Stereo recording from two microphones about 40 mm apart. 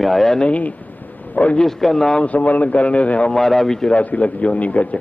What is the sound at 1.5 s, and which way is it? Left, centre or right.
Speech, centre.